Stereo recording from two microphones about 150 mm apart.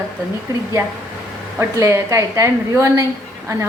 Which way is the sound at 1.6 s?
20° right (ahead or behind).